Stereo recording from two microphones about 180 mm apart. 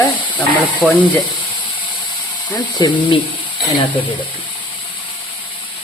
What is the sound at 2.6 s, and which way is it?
Speech, 25° left (ahead or behind).